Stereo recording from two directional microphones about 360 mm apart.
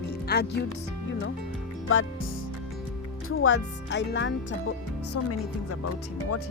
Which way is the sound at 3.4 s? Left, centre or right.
Left.